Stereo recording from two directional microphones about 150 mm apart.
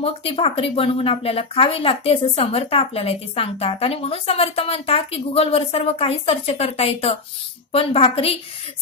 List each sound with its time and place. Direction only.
0.0 s speech: 40° left (ahead or behind)